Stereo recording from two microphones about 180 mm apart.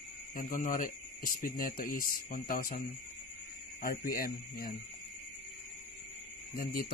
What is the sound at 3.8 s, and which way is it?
Speech, 55° left (ahead or behind).